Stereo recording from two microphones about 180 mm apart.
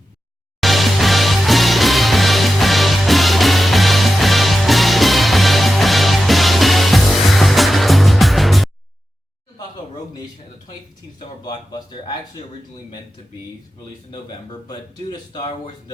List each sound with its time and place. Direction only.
0.6 s music: centre (ahead or behind)
11.4 s a man's voice: 25° left (ahead or behind)
15.3 s a man's voice: 25° left (ahead or behind)